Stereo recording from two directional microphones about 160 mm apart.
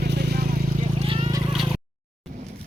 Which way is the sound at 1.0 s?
40° right (ahead or behind).